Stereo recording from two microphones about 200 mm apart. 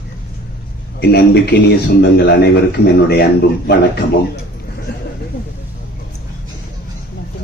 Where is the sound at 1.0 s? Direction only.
55° left (ahead or behind).